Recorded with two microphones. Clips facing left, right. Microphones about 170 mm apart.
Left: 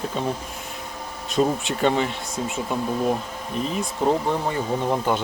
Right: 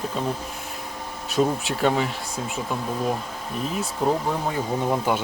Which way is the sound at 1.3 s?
5° right (ahead or behind).